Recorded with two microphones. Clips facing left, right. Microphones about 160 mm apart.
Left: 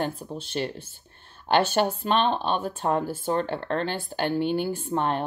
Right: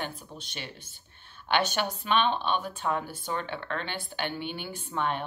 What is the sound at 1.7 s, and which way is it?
Speech, 35° left (ahead or behind).